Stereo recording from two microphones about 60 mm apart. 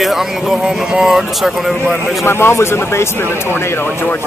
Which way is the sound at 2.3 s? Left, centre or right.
Left.